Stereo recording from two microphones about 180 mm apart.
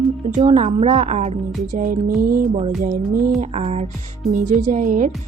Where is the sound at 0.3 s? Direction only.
40° right (ahead or behind).